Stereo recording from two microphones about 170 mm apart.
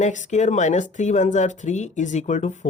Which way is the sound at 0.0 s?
45° left (ahead or behind).